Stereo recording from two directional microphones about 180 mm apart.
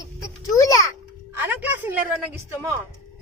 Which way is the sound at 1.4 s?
10° right (ahead or behind).